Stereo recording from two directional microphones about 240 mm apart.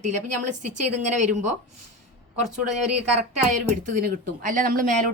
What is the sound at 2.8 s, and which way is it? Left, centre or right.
Speech, right.